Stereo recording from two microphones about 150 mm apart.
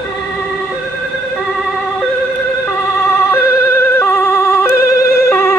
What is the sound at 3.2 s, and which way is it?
Emergency vehicle, 20° left (ahead or behind).